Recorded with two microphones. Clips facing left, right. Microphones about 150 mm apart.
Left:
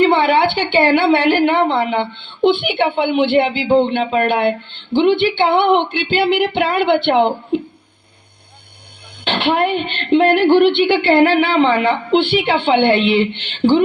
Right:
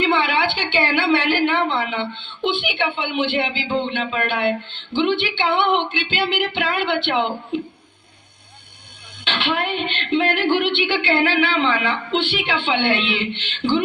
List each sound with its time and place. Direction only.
0.0 s a woman's voice: 50° left (ahead or behind)
7.1 s speech: 40° left (ahead or behind)
9.2 s speech: 55° left (ahead or behind)